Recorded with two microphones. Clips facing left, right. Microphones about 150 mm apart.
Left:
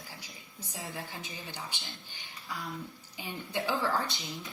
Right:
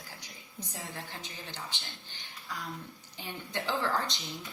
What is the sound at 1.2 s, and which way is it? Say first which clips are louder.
Speech: left 1 dB; 10° left (ahead or behind).